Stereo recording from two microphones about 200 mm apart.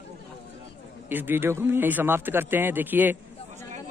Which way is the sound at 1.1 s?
10° right (ahead or behind).